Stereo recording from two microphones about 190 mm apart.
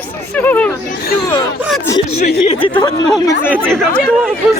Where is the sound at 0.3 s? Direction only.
10° left (ahead or behind).